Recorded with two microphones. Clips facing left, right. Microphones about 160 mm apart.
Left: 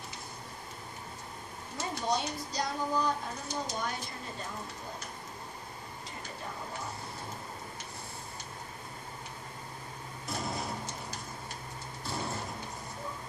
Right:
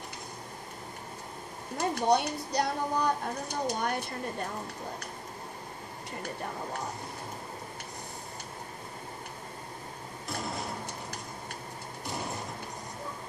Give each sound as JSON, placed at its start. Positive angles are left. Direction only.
{"t": 1.8, "sound": "speech", "side_deg": -60}